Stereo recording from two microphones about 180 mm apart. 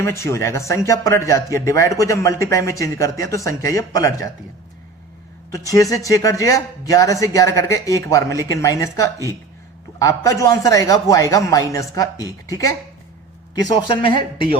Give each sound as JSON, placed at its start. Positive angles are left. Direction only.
{"t": 0.0, "sound": "speech", "side_deg": 15}
{"t": 5.5, "sound": "speech", "side_deg": 20}